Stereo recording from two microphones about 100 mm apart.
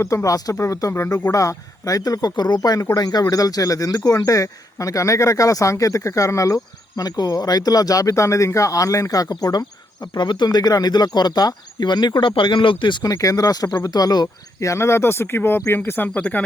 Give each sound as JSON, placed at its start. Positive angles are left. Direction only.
{"t": 0.0, "sound": "speech", "side_deg": 35}